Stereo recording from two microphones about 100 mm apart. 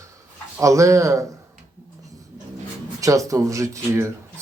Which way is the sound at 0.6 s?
30° right (ahead or behind).